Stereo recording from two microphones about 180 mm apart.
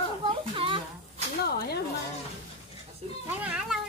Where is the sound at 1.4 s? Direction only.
60° left (ahead or behind).